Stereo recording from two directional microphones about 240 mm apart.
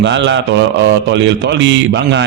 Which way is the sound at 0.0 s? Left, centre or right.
Right.